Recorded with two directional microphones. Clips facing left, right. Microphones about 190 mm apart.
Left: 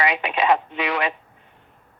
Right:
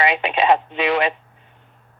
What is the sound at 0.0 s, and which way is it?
Speech, 25° right (ahead or behind).